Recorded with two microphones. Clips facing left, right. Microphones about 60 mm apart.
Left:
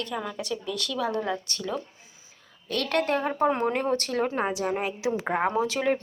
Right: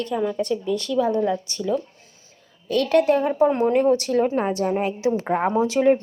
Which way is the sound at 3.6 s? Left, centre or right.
Centre.